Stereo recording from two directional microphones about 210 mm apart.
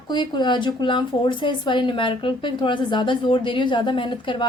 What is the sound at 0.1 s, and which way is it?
Speech, 20° left (ahead or behind).